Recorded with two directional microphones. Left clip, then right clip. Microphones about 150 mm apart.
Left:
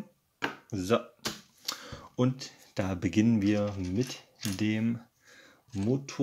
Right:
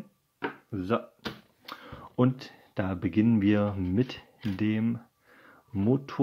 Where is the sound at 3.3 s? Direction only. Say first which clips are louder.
Right 2 dB; 20° right (ahead or behind).